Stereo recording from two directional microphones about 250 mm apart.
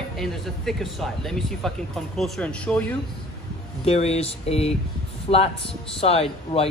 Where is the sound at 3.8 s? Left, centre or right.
Left.